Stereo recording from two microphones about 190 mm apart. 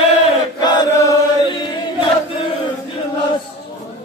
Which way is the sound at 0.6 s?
20° left (ahead or behind).